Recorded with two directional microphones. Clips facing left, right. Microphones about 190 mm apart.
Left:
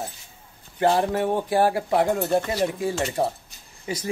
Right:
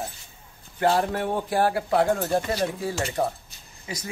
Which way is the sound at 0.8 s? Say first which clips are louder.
Left 2 dB; 20° left (ahead or behind).